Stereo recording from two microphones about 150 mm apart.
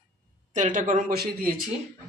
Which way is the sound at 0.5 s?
60° right (ahead or behind).